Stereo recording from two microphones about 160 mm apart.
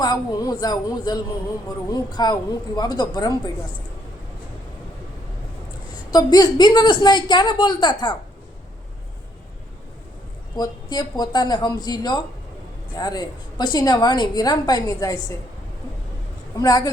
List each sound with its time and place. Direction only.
0.0 s a woman's voice: 25° left (ahead or behind)
6.1 s a woman's voice: 25° left (ahead or behind)
10.6 s a woman's voice: 25° left (ahead or behind)
16.6 s a woman's voice: 20° left (ahead or behind)